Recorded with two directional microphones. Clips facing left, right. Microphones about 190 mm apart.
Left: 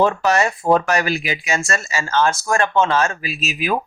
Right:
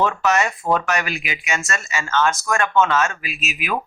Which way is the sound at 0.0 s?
35° left (ahead or behind).